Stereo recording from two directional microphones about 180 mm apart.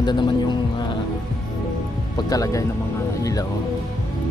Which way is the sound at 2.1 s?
20° left (ahead or behind).